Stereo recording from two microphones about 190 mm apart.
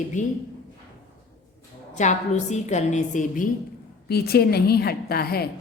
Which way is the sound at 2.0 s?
40° left (ahead or behind).